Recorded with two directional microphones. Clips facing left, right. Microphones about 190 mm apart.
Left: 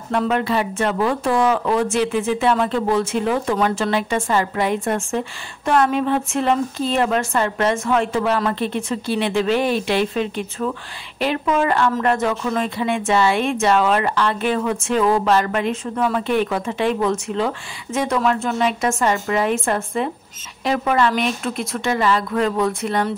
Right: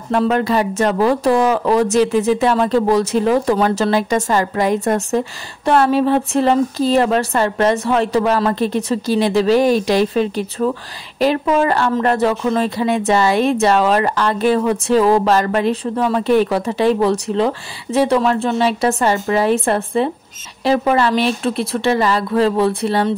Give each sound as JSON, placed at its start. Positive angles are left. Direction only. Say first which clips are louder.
{"t": 0.1, "sound": "a woman's voice", "louder": "right 4 dB", "side_deg": -40}